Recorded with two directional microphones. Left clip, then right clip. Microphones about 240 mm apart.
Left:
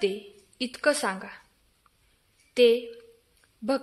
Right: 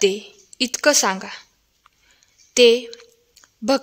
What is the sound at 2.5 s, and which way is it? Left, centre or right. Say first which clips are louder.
Speech: right 7 dB; right.